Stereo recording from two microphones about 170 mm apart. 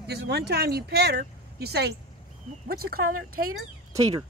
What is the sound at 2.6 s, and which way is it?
Speech, 60° right (ahead or behind).